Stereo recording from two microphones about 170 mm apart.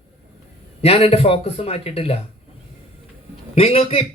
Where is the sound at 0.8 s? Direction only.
35° left (ahead or behind).